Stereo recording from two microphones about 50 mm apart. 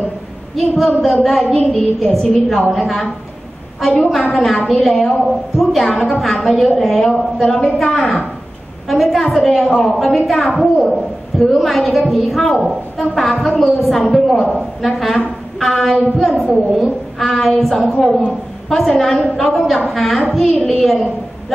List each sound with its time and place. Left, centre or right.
0.6 s a woman's voice: centre
14.1 s a woman's voice: centre
14.9 s brass instrument: centre
16.2 s a woman's voice: centre